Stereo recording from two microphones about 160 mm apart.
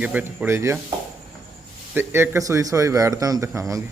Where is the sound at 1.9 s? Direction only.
15° right (ahead or behind).